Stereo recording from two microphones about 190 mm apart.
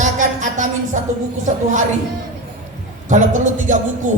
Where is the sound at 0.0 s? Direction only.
40° right (ahead or behind).